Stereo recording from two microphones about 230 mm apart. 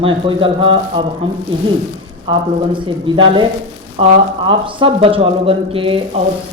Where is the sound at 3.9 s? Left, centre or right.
Right.